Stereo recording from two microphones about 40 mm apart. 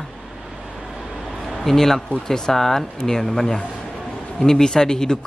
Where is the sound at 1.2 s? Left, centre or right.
Centre.